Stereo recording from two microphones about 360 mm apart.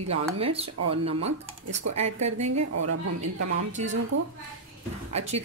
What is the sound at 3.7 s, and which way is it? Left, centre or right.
Speech, centre.